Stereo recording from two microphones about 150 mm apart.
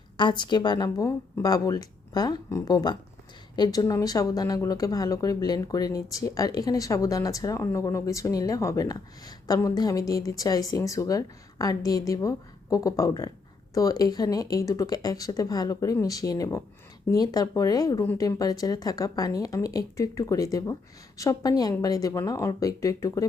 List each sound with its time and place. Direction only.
0.2 s speech: 30° left (ahead or behind)